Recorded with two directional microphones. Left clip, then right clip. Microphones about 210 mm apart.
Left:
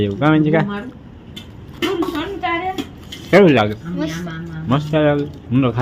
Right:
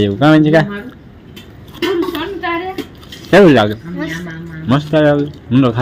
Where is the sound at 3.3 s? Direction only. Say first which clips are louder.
Right 4 dB; 15° right (ahead or behind).